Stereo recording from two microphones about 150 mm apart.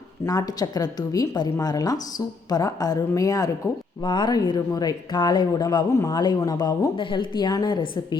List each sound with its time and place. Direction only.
0.3 s speech: 25° left (ahead or behind)